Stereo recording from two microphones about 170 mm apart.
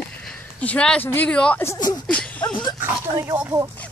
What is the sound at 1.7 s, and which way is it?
Speech, 20° left (ahead or behind).